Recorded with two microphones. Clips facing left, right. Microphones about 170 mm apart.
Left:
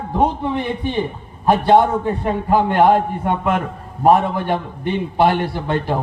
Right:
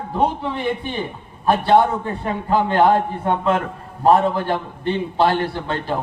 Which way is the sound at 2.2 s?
15° left (ahead or behind).